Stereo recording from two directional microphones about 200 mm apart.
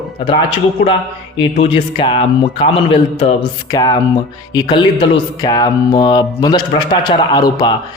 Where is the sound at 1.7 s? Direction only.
25° left (ahead or behind).